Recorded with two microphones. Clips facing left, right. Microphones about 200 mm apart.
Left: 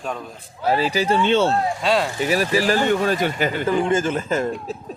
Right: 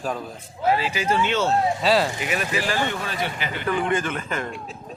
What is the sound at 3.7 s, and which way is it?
Speech, 30° left (ahead or behind).